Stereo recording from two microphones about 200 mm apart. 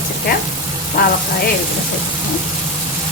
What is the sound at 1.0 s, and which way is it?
Frying, 45° left (ahead or behind).